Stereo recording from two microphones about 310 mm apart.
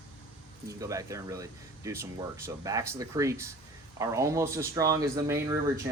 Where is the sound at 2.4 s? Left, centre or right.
Centre.